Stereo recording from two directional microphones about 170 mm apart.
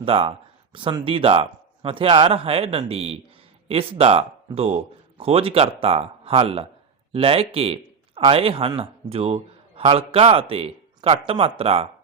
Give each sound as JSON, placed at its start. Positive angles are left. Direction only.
{"t": 0.0, "sound": "a man's voice", "side_deg": -35}